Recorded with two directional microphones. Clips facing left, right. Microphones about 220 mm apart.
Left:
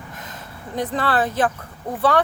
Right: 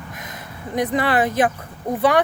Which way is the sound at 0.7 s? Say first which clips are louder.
Right 3 dB; 15° right (ahead or behind).